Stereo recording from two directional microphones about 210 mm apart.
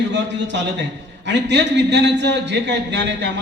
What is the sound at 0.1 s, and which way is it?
A man's voice, 60° right (ahead or behind).